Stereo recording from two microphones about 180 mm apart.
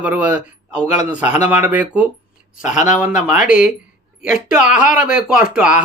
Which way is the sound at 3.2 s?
5° right (ahead or behind).